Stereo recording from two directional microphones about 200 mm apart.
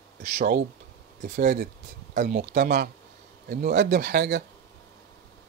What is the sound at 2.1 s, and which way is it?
Speech, 45° right (ahead or behind).